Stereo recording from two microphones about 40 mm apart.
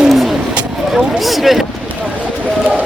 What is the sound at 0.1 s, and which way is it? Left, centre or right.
Vehicle, centre.